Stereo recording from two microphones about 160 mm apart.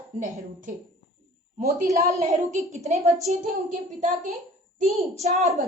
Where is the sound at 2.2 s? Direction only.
50° right (ahead or behind).